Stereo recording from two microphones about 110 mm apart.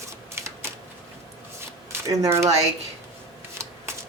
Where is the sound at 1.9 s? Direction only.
30° right (ahead or behind).